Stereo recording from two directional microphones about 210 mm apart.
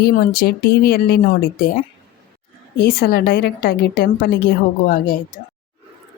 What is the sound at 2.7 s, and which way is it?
A woman's voice, 45° left (ahead or behind).